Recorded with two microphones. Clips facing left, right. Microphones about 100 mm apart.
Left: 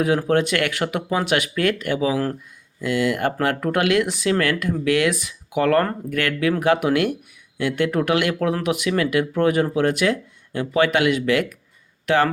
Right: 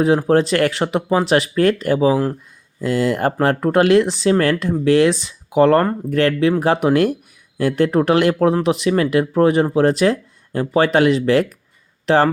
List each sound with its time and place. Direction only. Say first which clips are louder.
0.0 s speech: right 4 dB; 30° right (ahead or behind)